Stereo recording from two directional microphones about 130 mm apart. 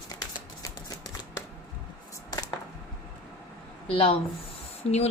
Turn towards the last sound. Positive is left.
turn(degrees=50)  # may be behind; listen again after turning